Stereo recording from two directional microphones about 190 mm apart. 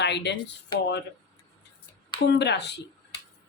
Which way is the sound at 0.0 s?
65° left (ahead or behind).